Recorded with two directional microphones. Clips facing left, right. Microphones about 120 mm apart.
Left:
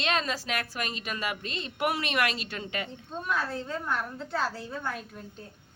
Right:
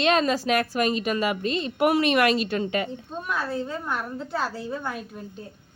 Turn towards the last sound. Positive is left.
turn(degrees=-10)  # may be behind; listen again after turning